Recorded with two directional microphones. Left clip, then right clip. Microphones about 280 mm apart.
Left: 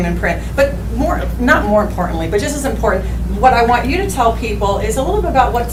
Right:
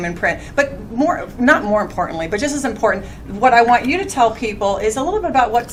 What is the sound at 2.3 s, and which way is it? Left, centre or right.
Speech, right.